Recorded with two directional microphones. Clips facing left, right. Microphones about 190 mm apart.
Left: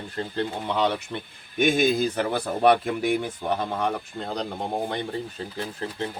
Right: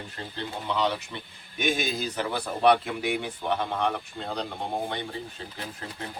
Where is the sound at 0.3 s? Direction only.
55° left (ahead or behind).